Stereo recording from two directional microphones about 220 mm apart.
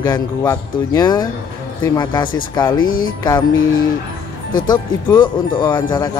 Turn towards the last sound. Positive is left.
turn(degrees=20)  # may be behind; listen again after turning